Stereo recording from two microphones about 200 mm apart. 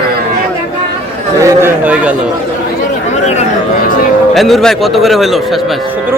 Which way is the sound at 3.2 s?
35° left (ahead or behind).